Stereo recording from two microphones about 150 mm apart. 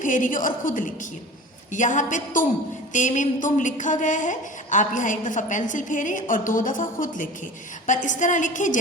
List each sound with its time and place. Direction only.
0.0 s a woman's voice: 60° left (ahead or behind)